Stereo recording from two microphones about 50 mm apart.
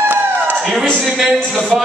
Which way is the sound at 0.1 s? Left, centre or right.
Right.